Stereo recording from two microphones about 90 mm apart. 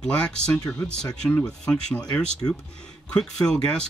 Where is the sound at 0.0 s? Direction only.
10° left (ahead or behind).